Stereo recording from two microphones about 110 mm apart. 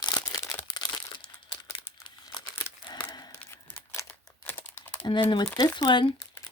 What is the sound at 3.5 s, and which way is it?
Crumpling, 25° left (ahead or behind).